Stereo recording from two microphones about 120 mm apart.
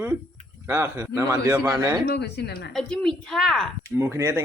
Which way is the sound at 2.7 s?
5° left (ahead or behind).